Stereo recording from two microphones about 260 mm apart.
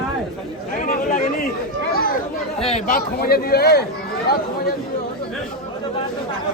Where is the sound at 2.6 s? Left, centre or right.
Left.